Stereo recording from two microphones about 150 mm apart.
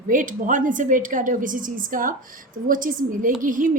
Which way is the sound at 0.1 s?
60° right (ahead or behind).